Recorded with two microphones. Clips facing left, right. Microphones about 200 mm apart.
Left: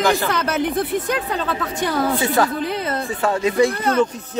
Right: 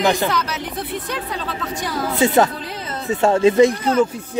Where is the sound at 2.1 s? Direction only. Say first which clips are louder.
Right 3 dB; 25° right (ahead or behind).